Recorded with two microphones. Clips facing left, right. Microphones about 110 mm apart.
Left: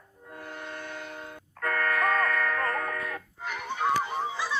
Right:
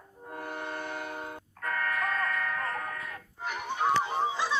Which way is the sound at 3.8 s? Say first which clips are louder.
Even; 10° right (ahead or behind).